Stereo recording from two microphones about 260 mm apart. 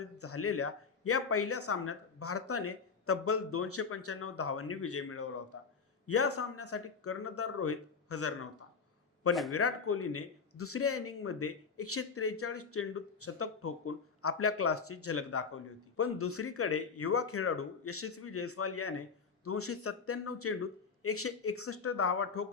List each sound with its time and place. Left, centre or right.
0.0 s speech: left